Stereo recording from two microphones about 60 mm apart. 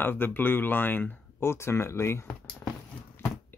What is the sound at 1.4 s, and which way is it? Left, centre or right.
Speech, left.